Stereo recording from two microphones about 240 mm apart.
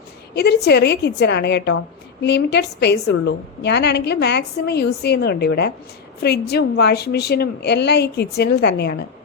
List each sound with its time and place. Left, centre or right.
0.3 s a woman's voice: left